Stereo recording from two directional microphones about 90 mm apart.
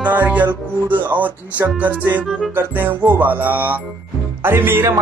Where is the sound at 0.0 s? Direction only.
20° right (ahead or behind).